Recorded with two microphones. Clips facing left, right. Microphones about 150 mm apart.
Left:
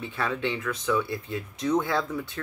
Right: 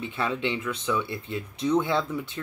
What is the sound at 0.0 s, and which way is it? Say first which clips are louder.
Speech: right 1 dB; 20° right (ahead or behind).